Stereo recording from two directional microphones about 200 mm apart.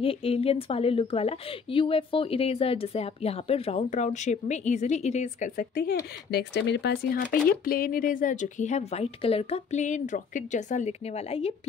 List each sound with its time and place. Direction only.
0.0 s a woman's voice: 30° left (ahead or behind); by 5.9 s 45° left (ahead or behind)
6.3 s speech: 60° left (ahead or behind); by 11.5 s 30° left (ahead or behind)